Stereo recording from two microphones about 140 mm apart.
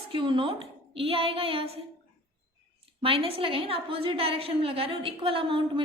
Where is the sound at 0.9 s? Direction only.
45° right (ahead or behind).